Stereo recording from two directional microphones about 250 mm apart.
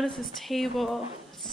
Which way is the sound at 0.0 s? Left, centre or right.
Centre.